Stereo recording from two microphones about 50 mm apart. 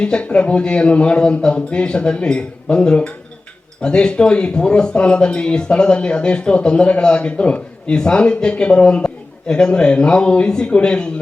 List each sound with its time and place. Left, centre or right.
0.0 s speech: left